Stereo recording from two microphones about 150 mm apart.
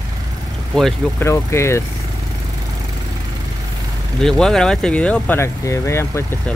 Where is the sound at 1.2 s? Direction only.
20° left (ahead or behind).